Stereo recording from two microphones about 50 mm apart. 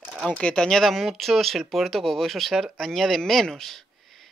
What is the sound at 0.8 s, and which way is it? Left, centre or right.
Speech, centre.